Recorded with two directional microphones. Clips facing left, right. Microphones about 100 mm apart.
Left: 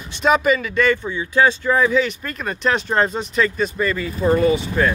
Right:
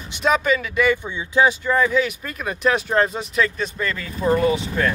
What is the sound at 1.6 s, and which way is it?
Speech, centre (ahead or behind).